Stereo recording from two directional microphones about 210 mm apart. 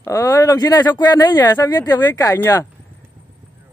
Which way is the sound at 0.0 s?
15° left (ahead or behind).